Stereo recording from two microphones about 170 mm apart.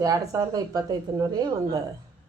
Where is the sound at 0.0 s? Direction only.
20° right (ahead or behind).